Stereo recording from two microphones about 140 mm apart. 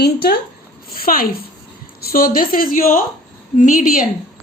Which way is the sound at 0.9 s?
90° left.